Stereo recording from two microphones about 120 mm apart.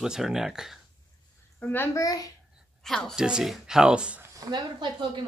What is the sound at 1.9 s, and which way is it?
Speech, 30° left (ahead or behind).